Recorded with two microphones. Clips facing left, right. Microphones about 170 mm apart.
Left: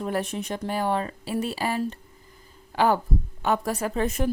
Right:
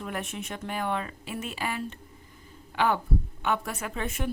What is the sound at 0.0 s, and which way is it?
A woman's voice, 35° left (ahead or behind).